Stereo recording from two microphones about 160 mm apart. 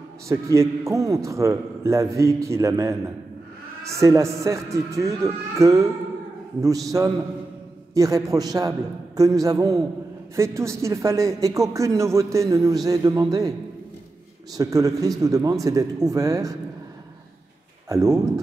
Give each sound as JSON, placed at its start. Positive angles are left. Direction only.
{"t": 0.3, "sound": "speech", "side_deg": -20}
{"t": 14.6, "sound": "speech", "side_deg": -20}
{"t": 17.8, "sound": "speech", "side_deg": -20}